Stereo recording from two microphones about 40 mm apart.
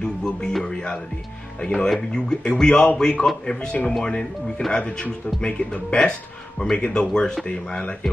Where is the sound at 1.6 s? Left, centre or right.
Centre.